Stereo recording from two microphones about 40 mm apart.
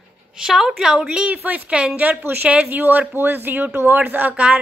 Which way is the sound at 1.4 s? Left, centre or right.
Right.